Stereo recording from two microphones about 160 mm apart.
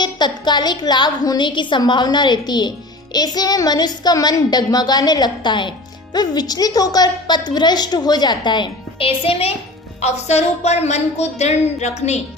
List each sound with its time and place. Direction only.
0.0 s a woman's voice: 25° left (ahead or behind); by 12.2 s 45° left (ahead or behind)